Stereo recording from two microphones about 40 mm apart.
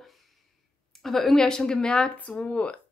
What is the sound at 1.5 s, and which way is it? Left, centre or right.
Speech, centre.